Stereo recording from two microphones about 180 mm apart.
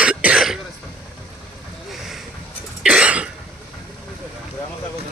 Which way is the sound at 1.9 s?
Centre (ahead or behind).